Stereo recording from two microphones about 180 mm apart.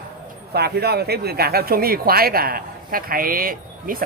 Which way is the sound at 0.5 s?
60° right (ahead or behind).